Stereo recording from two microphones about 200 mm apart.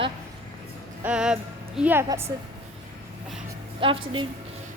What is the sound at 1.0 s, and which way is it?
A woman's voice, 5° right (ahead or behind).